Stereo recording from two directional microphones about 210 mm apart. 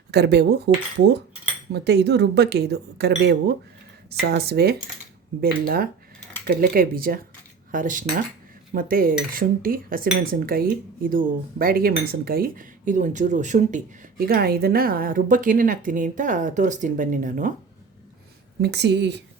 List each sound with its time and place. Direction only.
0.1 s speech: 50° right (ahead or behind)
4.1 s speech: 50° right (ahead or behind)
18.6 s speech: 55° right (ahead or behind)